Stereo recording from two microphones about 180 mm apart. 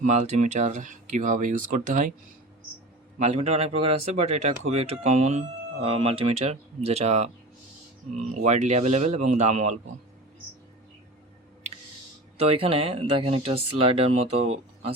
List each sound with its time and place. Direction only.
0.0 s speech: 40° right (ahead or behind)
3.2 s speech: 40° right (ahead or behind)
8.4 s speech: 40° right (ahead or behind)
12.4 s speech: 30° right (ahead or behind)